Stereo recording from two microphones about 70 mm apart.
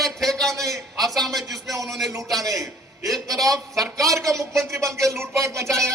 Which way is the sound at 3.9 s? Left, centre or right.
Right.